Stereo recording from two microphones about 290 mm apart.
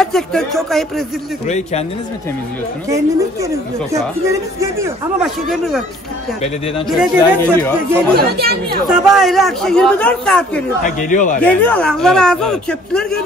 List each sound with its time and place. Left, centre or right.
0.0 s a man's voice: centre
1.5 s speech: left
2.9 s speech: centre
6.9 s a man's voice: centre
8.1 s speech: right
8.8 s a man's voice: centre
10.8 s speech: left
11.4 s a man's voice: centre